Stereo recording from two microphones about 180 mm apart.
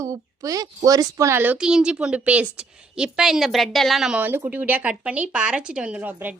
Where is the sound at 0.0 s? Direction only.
20° right (ahead or behind).